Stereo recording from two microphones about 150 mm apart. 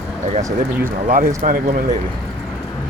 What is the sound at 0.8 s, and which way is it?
Speech, 70° right (ahead or behind).